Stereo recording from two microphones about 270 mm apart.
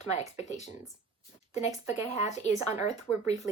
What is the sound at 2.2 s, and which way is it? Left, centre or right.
Speech, left.